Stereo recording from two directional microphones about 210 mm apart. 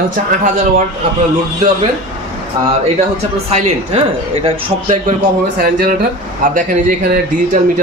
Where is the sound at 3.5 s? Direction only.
30° right (ahead or behind).